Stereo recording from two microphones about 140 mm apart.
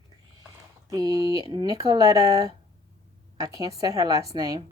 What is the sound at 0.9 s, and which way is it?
Speech, 25° right (ahead or behind).